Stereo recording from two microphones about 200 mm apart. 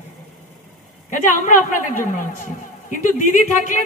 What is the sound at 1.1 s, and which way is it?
Speech, 40° left (ahead or behind).